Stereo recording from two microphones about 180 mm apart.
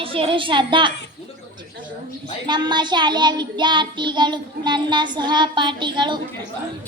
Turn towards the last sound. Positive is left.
turn(degrees=-25)  # may be behind; listen again after turning